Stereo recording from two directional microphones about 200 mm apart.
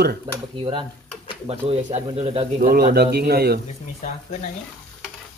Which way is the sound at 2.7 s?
45° right (ahead or behind).